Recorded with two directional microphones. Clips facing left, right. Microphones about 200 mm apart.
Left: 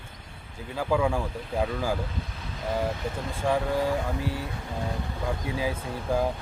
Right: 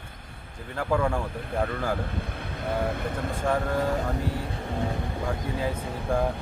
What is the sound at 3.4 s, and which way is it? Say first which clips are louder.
Speech: left 1 dB; 10° left (ahead or behind).